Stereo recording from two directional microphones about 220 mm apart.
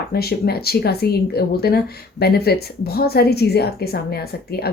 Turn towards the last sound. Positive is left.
turn(degrees=45)  # may be behind; listen again after turning